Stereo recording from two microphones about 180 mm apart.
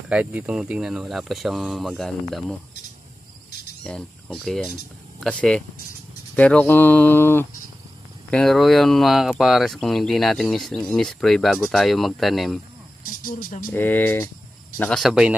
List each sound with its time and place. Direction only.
0.1 s speech: 5° right (ahead or behind)
3.8 s speech: 5° left (ahead or behind)
13.0 s speech: 50° left (ahead or behind)
13.7 s speech: 10° left (ahead or behind)